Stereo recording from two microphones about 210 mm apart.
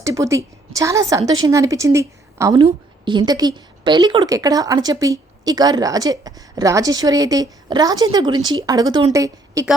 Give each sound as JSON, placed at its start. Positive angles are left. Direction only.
{"t": 0.0, "sound": "a woman's voice", "side_deg": -15}